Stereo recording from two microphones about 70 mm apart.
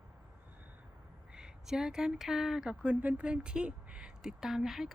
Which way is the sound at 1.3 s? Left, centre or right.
Centre.